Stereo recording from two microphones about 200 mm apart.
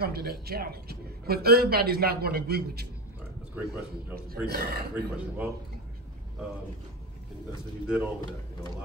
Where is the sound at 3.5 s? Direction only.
10° right (ahead or behind).